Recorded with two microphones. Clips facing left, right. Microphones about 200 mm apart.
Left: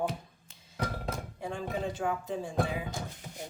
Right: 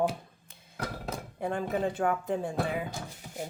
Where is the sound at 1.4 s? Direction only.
55° right (ahead or behind).